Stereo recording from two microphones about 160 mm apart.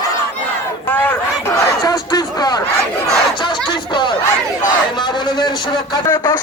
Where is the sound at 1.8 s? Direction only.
25° left (ahead or behind).